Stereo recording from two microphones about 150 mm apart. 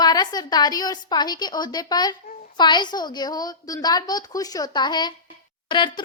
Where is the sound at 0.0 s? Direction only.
25° left (ahead or behind).